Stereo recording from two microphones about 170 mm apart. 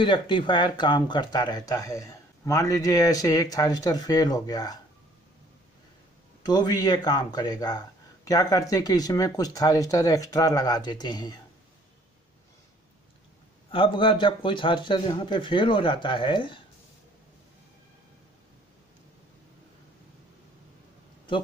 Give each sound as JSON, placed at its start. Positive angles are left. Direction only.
{"t": 0.0, "sound": "speech", "side_deg": 30}
{"t": 6.4, "sound": "speech", "side_deg": 25}
{"t": 13.7, "sound": "speech", "side_deg": 30}